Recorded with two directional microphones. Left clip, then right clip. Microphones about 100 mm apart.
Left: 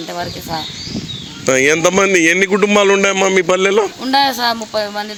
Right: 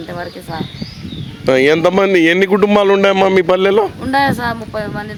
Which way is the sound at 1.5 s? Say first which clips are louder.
Right 1 dB; 35° right (ahead or behind).